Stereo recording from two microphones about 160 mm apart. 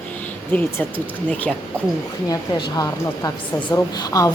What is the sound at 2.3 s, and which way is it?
A woman's voice, 25° left (ahead or behind).